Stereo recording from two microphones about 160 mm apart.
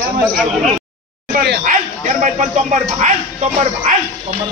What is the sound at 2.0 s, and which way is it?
Speech, 50° right (ahead or behind).